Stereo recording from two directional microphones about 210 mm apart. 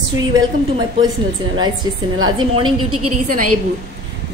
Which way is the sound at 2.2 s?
20° right (ahead or behind).